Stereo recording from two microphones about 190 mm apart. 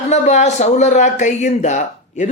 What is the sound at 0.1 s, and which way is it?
Speech, 35° left (ahead or behind).